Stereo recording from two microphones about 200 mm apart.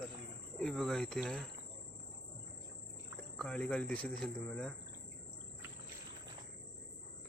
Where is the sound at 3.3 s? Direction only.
5° left (ahead or behind).